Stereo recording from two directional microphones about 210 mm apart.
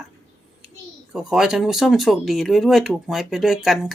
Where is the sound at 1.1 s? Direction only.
5° right (ahead or behind).